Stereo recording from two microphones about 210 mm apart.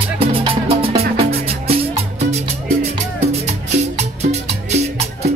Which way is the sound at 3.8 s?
30° right (ahead or behind).